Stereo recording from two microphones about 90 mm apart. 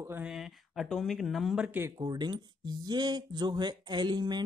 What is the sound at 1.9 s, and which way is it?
Speech, 50° right (ahead or behind).